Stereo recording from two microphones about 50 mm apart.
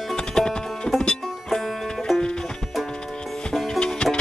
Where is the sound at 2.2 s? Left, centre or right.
Centre.